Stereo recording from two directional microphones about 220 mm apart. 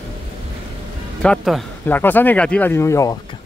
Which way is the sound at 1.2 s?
Centre (ahead or behind).